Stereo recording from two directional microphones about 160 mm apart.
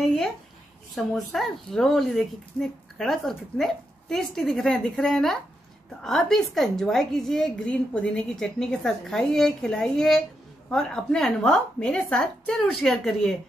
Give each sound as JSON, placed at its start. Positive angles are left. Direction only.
{"t": 0.0, "sound": "a woman's voice", "side_deg": 0}